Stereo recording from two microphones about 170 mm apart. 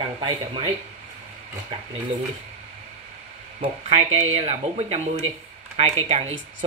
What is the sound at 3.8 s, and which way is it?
Speech, 40° right (ahead or behind).